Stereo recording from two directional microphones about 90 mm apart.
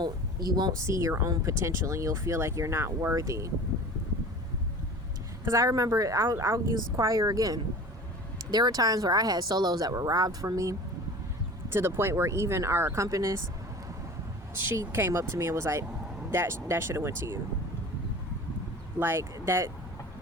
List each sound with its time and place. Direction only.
0.0 s speech: 50° right (ahead or behind)
0.9 s speech: 35° right (ahead or behind)
5.5 s speech: 40° right (ahead or behind)
11.7 s speech: 25° right (ahead or behind)
14.6 s speech: 25° right (ahead or behind)
18.9 s speech: 30° right (ahead or behind)